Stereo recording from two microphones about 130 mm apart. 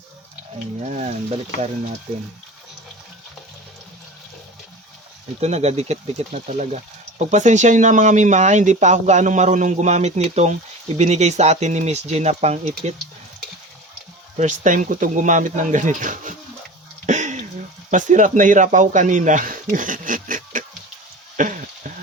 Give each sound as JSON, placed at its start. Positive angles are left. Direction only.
{"t": 0.9, "sound": "speech", "side_deg": -60}
{"t": 5.4, "sound": "speech", "side_deg": -55}
{"t": 14.3, "sound": "speech", "side_deg": -75}
{"t": 17.1, "sound": "a sound", "side_deg": -65}
{"t": 17.9, "sound": "speech", "side_deg": -75}
{"t": 21.3, "sound": "sizzle", "side_deg": -85}